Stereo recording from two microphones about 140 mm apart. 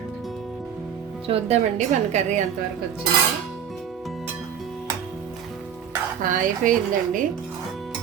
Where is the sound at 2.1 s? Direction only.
55° right (ahead or behind).